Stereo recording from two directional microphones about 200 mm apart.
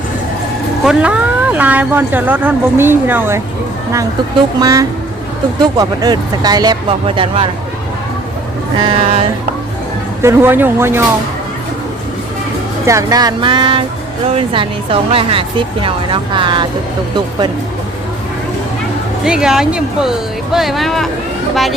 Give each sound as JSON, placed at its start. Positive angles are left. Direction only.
{"t": 0.9, "sound": "speech", "side_deg": -5}
{"t": 8.8, "sound": "speech", "side_deg": -25}
{"t": 10.2, "sound": "speech", "side_deg": -10}
{"t": 12.8, "sound": "speech", "side_deg": -15}
{"t": 19.2, "sound": "speech", "side_deg": -5}